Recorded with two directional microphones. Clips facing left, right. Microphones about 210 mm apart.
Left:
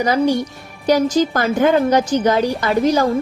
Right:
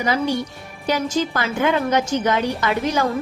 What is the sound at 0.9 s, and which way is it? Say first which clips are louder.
A woman's voice: left 6 dB; 40° left (ahead or behind).